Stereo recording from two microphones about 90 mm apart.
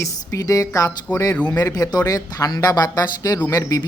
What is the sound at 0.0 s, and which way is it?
Speech, 40° left (ahead or behind).